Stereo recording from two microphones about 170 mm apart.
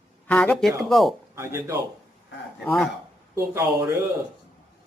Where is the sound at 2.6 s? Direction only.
5° left (ahead or behind).